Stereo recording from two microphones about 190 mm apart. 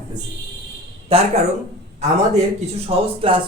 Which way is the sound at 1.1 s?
30° right (ahead or behind).